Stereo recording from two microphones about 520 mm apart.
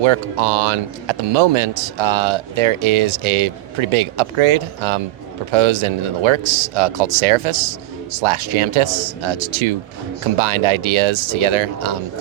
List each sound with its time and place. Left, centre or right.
0.0 s speech: right